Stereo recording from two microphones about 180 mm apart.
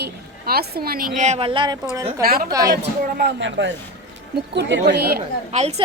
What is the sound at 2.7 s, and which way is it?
Speech, 70° right (ahead or behind).